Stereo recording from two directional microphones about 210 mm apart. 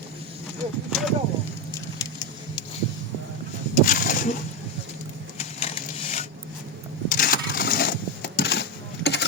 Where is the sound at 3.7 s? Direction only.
40° left (ahead or behind).